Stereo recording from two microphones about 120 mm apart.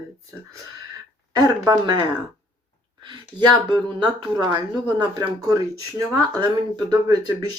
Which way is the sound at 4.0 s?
35° right (ahead or behind).